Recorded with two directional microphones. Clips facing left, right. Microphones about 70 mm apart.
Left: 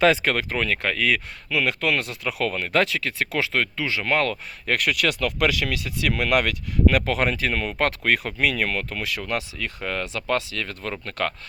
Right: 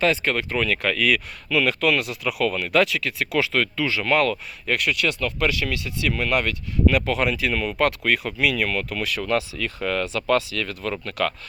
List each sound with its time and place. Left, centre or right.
0.0 s speech: left
0.5 s speech: left
4.3 s speech: left
4.9 s speech: left
6.9 s speech: left
9.0 s speech: left